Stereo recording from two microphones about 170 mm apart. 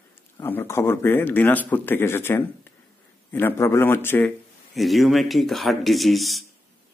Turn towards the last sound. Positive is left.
turn(degrees=0)  # may be behind; listen again after turning